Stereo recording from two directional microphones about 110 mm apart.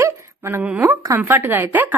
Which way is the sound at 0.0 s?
25° right (ahead or behind).